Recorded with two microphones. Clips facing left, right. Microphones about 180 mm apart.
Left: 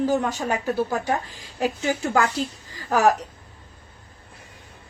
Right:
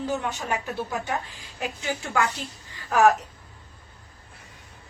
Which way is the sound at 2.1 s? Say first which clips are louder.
Left 4 dB; 40° left (ahead or behind).